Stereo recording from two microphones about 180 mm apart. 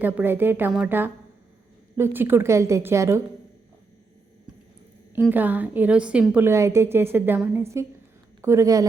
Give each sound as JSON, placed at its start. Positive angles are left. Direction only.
{"t": 0.0, "sound": "a woman's voice", "side_deg": -10}
{"t": 5.3, "sound": "a woman's voice", "side_deg": -10}